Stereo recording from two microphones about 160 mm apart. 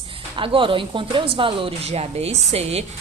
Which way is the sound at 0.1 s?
35° right (ahead or behind).